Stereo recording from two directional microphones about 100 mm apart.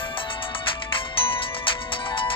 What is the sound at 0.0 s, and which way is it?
Music, 60° left (ahead or behind).